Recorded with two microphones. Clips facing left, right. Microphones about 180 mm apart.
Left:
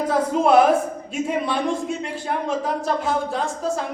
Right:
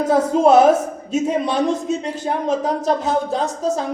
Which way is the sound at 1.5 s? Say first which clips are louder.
Right 4 dB; 40° right (ahead or behind).